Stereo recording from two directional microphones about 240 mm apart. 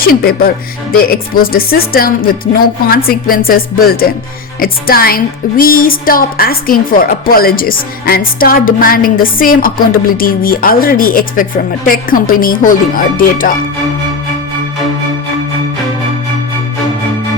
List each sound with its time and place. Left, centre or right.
0.1 s speech: left